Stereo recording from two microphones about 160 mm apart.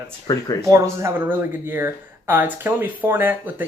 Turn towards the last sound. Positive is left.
turn(degrees=-10)  # may be behind; listen again after turning